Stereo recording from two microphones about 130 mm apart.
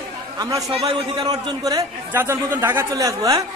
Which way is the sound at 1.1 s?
30° right (ahead or behind).